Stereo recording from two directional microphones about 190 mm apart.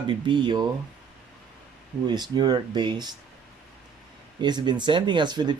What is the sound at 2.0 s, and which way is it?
Speech, 20° right (ahead or behind).